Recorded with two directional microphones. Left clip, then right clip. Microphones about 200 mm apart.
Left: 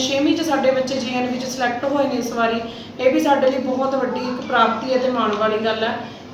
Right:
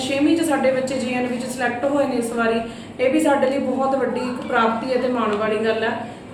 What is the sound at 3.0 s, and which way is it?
Speech, 10° right (ahead or behind).